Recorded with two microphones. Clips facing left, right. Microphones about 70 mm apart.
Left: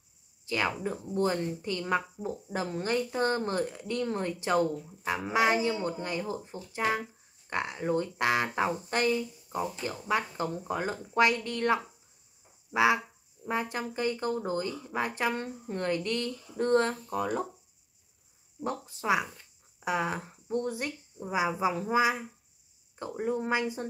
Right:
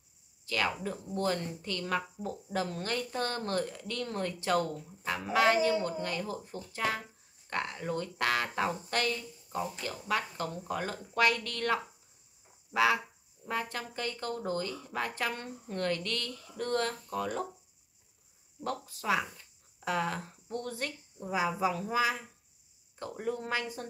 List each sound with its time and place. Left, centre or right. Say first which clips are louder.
0.5 s a woman's voice: left 2 dB; left
18.6 s a woman's voice: left 2 dB; left